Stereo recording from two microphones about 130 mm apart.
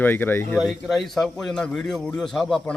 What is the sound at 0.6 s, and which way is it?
A man's voice, centre (ahead or behind).